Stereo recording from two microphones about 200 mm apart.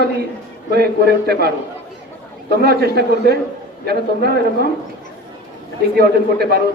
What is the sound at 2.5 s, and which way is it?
Speech, 50° right (ahead or behind).